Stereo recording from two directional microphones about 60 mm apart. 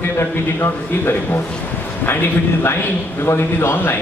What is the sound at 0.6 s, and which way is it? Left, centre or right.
Speech, left.